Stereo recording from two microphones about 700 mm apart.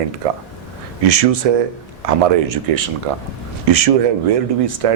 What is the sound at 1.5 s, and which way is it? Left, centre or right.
A man's voice, right.